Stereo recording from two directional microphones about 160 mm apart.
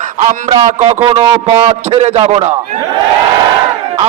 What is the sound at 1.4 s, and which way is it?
A man's voice, 35° right (ahead or behind).